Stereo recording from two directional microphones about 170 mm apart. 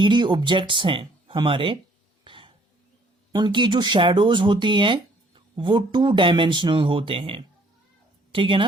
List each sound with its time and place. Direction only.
0.0 s speech: 25° right (ahead or behind)
2.2 s throat clearing: 30° right (ahead or behind)
3.3 s a woman's voice: 25° right (ahead or behind)